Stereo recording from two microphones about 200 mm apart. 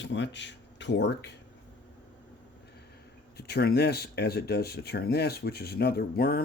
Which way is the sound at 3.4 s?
55° left (ahead or behind).